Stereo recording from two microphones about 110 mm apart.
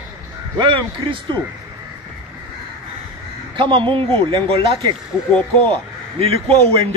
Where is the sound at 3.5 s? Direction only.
50° right (ahead or behind).